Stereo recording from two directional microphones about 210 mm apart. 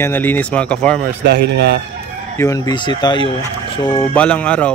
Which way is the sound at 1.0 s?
50° right (ahead or behind).